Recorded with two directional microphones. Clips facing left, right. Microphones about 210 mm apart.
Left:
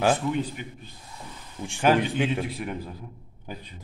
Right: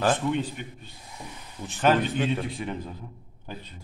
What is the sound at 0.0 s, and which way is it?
A man's voice, 10° left (ahead or behind).